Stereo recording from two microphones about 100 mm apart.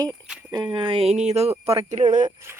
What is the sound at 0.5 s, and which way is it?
Speech, 50° right (ahead or behind).